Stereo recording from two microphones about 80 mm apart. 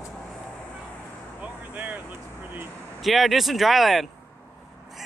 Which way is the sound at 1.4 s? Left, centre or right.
Centre.